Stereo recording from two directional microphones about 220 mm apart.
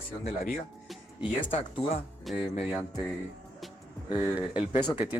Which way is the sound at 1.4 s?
25° left (ahead or behind).